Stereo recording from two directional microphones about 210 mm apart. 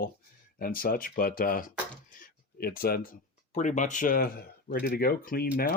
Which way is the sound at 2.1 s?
45° left (ahead or behind).